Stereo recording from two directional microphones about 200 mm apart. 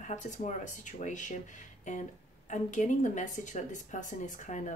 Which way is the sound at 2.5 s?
40° left (ahead or behind).